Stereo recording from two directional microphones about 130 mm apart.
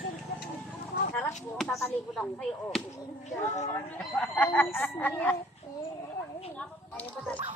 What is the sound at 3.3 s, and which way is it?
Speech, 65° left (ahead or behind).